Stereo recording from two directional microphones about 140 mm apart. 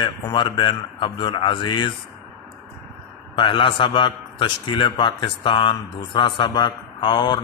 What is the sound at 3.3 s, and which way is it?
A man's voice, 35° left (ahead or behind).